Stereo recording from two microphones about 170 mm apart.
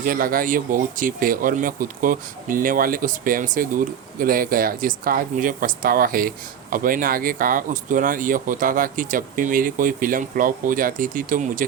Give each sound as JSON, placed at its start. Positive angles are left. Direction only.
{"t": 0.0, "sound": "speech", "side_deg": -55}